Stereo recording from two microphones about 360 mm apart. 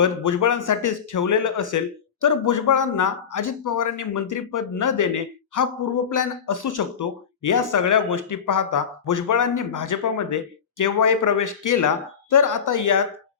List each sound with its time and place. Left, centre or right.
0.0 s speech: left